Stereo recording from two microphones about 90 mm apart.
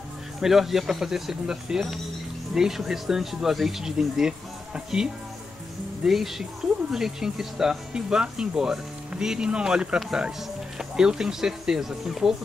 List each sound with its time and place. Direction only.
0.4 s speech: 5° right (ahead or behind)